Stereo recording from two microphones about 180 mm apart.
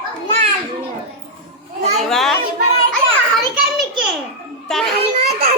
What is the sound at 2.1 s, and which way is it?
Speech, centre (ahead or behind).